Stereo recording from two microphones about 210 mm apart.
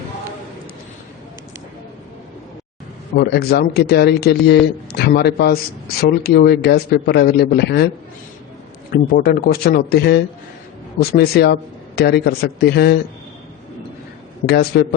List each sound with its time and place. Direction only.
3.2 s speech: 50° left (ahead or behind)
8.9 s speech: 45° left (ahead or behind)
14.4 s speech: 50° left (ahead or behind)